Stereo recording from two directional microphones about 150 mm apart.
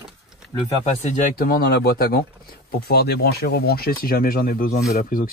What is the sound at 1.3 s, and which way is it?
Speech, 80° left.